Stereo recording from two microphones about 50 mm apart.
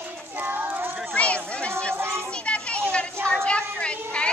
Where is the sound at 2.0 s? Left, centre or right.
Right.